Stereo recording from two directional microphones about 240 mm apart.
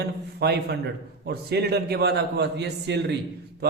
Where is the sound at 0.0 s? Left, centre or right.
Right.